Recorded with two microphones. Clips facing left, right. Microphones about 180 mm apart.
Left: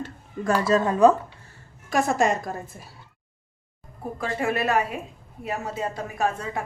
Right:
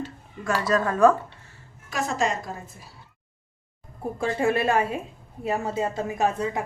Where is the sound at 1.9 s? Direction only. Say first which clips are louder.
Left 4 dB; 50° left (ahead or behind).